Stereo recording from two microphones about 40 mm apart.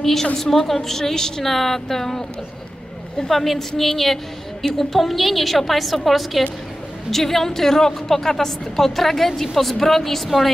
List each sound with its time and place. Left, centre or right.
0.0 s a woman's voice: centre
3.3 s a woman's voice: centre